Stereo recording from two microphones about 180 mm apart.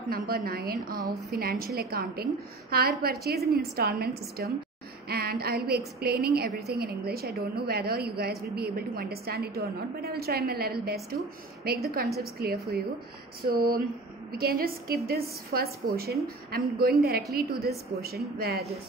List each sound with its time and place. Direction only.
0.1 s a woman's voice: 55° right (ahead or behind)
12.2 s a woman's voice: 60° right (ahead or behind)